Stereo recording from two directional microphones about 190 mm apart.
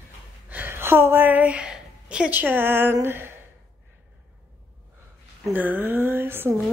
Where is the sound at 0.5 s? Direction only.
10° right (ahead or behind).